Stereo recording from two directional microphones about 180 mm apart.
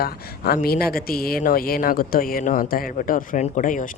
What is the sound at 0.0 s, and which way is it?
Speech, 60° left (ahead or behind).